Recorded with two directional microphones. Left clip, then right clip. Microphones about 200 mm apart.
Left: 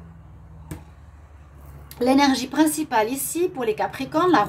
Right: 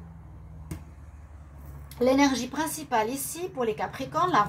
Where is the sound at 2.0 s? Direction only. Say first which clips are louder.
Left 4 dB; 50° left (ahead or behind).